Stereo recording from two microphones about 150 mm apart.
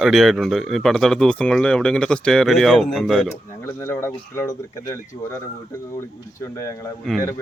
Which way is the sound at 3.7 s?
15° left (ahead or behind).